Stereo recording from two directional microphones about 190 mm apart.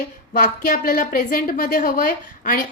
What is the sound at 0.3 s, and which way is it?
A woman's voice, 45° left (ahead or behind).